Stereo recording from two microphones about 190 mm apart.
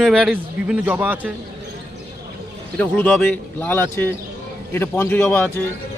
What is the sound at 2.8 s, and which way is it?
Speech, 10° left (ahead or behind).